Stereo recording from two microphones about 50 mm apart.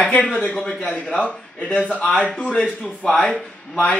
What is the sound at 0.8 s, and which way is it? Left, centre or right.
A man's voice, left.